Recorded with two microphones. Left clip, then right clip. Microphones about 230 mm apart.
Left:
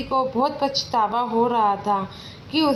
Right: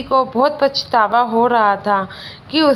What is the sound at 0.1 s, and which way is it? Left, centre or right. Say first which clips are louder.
A woman's voice: right 7 dB; right.